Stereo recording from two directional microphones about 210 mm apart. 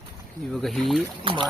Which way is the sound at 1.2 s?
25° right (ahead or behind).